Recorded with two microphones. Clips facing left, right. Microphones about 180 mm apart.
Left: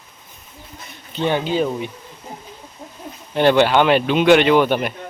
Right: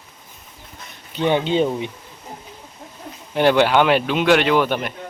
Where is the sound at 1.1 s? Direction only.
20° right (ahead or behind).